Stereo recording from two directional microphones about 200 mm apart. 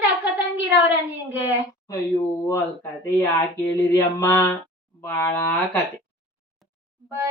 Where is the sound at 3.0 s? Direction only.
15° left (ahead or behind).